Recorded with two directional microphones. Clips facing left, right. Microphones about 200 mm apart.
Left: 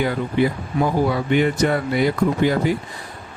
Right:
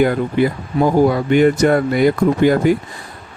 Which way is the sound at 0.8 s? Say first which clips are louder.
Right 6 dB; 50° right (ahead or behind).